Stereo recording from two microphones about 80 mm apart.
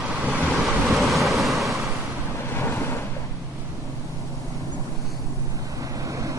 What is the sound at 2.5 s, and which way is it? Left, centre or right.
Waves, left.